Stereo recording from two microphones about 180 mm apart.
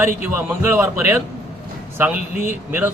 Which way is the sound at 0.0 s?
10° right (ahead or behind).